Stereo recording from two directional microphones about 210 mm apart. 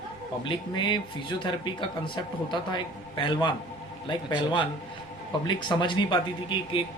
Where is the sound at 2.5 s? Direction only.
20° left (ahead or behind).